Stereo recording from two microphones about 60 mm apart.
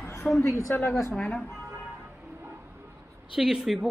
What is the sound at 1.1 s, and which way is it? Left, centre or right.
Speech, centre.